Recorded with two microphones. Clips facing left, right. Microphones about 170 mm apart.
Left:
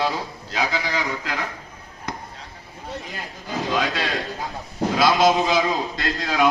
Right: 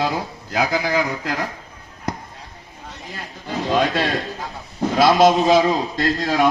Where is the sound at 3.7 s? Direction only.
50° right (ahead or behind).